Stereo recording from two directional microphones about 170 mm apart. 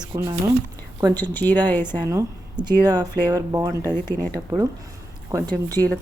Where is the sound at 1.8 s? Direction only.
20° right (ahead or behind).